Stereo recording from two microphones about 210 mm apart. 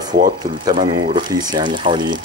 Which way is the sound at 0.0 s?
20° right (ahead or behind).